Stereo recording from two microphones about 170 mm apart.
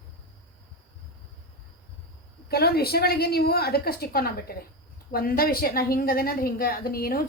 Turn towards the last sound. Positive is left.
turn(degrees=60)  # may be behind; listen again after turning